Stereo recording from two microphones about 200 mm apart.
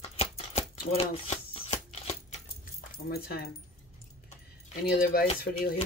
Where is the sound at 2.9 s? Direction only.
50° left (ahead or behind).